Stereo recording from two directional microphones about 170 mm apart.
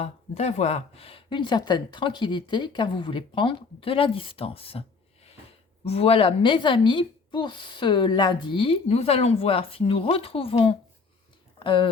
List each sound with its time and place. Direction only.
0.0 s speech: 40° left (ahead or behind)